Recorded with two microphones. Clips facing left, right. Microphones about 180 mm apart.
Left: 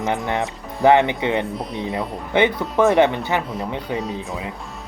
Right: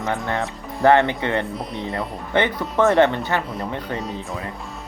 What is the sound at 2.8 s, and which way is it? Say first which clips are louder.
Speech: left 1 dB; 15° left (ahead or behind).